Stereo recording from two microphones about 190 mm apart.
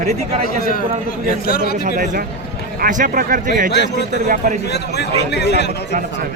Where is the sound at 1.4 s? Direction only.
55° left (ahead or behind).